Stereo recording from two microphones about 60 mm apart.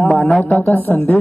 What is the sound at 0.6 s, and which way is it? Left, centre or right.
Speech, left.